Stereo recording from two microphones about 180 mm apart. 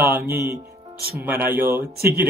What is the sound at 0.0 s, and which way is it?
Speech, 15° right (ahead or behind).